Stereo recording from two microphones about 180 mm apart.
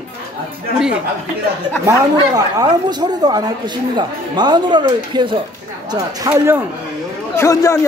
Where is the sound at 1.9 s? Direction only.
20° right (ahead or behind).